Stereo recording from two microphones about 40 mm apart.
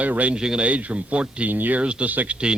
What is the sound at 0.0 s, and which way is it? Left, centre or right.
Speech, right.